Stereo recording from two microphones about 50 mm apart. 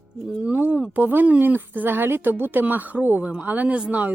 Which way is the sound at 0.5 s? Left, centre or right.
Right.